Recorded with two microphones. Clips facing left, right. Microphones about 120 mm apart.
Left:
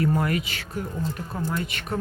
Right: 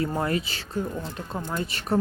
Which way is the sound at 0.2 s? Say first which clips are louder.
Even; 30° right (ahead or behind).